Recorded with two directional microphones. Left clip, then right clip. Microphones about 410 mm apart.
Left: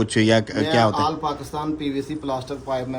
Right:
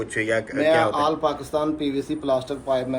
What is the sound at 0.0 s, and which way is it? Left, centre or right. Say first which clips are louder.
A man's voice: left 5 dB; centre.